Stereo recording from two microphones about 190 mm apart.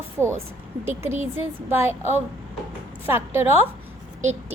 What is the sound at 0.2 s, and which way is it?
A woman's voice, 15° right (ahead or behind).